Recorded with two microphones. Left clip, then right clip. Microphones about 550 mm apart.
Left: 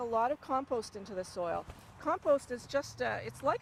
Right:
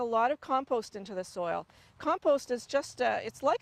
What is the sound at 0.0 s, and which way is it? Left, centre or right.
Speech, right.